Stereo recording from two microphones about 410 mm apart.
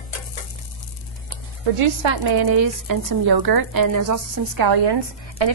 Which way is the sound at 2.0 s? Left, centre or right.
Right.